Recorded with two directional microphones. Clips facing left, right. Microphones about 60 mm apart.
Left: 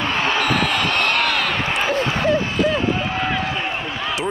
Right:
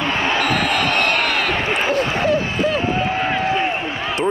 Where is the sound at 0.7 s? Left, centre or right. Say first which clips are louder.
Right 2 dB; right.